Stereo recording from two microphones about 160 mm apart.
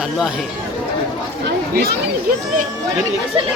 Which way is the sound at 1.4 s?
80° right.